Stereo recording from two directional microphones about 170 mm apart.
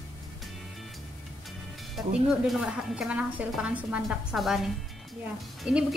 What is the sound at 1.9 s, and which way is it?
A woman's voice, centre (ahead or behind).